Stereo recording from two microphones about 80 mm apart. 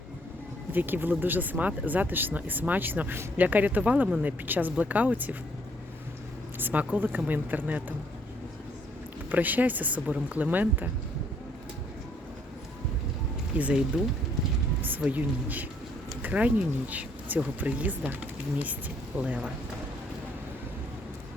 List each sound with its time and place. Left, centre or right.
0.7 s speech: right
6.6 s speech: right
9.3 s speech: right
13.6 s speech: centre
14.8 s rain: right
15.1 s speech: right